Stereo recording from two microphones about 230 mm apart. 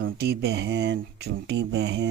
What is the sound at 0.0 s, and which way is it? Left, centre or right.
Speech, right.